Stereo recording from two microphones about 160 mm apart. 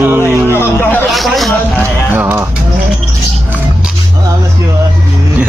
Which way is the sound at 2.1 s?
15° right (ahead or behind).